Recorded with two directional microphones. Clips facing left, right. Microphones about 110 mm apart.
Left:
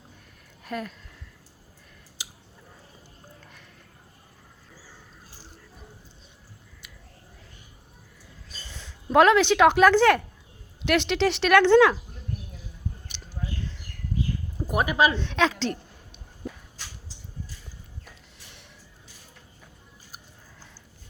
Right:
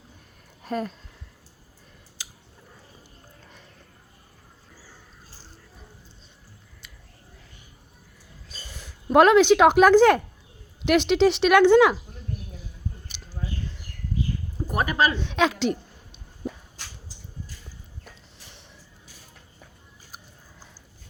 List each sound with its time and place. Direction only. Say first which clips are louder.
0.6 s speech: right 4 dB; 30° right (ahead or behind)
2.2 s a sound: left 2 dB; 20° left (ahead or behind)
8.5 s speech: right 1 dB; 10° right (ahead or behind)
14.7 s speech: left 1 dB; 10° left (ahead or behind)
15.2 s speech: right 2 dB; 15° right (ahead or behind)
16.4 s a sound: right 4 dB; 20° right (ahead or behind)